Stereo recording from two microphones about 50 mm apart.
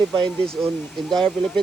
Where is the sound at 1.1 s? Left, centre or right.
Centre.